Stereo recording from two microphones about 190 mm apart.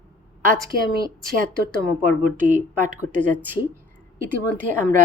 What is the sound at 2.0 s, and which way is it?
Speech, 45° right (ahead or behind).